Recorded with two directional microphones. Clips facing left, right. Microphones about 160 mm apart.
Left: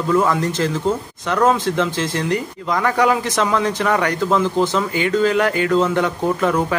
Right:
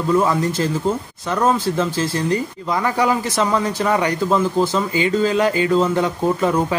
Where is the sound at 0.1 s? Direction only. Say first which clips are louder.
Even; 15° right (ahead or behind).